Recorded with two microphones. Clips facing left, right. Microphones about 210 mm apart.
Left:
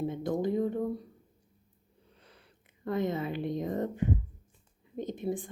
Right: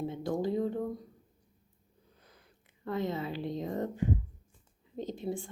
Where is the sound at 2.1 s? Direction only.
70° left (ahead or behind).